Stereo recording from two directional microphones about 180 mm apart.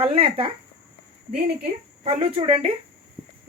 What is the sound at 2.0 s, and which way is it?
Speech, 35° right (ahead or behind).